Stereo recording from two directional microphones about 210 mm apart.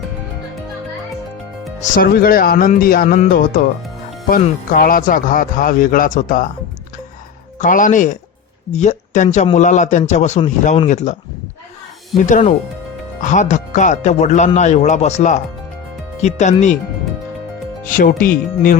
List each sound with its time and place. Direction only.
1.8 s speech: 45° left (ahead or behind)
7.6 s speech: 40° left (ahead or behind)
12.2 s speech: 35° left (ahead or behind)
17.8 s speech: 40° left (ahead or behind)